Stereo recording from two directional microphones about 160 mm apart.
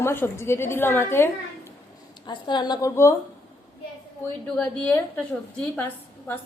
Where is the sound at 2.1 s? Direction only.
30° left (ahead or behind).